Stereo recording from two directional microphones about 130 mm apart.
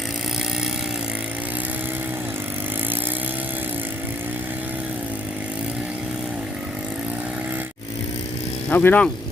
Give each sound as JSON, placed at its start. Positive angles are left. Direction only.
{"t": 8.7, "sound": "speech", "side_deg": 15}